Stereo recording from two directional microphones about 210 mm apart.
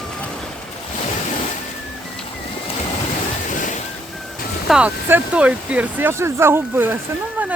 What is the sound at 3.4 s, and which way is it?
Waves, 35° left (ahead or behind).